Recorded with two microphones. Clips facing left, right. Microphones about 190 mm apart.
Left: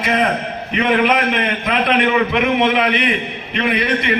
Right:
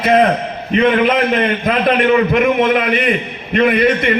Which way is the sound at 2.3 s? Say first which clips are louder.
Right 3 dB; 45° right (ahead or behind).